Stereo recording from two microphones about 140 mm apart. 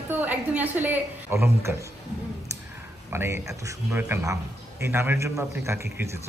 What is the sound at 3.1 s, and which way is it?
A woman's voice, 15° right (ahead or behind).